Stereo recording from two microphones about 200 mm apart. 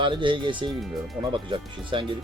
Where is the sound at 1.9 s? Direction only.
25° right (ahead or behind).